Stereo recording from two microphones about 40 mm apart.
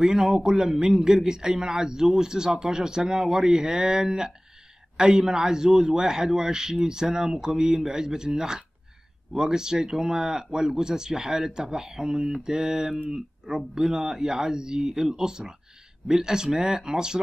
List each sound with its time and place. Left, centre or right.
0.0 s a man's voice: centre